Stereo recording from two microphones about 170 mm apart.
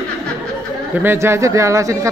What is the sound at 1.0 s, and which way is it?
Speech, 15° right (ahead or behind).